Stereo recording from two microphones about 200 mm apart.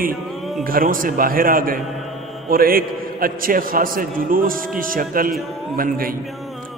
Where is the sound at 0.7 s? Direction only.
45° right (ahead or behind).